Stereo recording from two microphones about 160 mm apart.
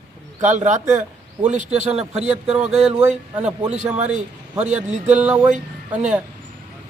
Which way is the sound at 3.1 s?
45° right (ahead or behind).